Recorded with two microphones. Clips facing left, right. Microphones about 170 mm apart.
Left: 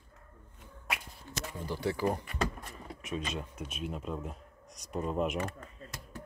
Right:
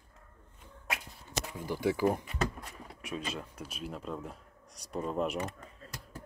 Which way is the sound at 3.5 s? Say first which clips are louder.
Left 2 dB; 30° right (ahead or behind).